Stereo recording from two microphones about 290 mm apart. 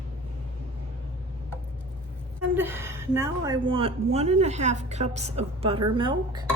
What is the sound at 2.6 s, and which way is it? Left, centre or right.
A woman's voice, centre.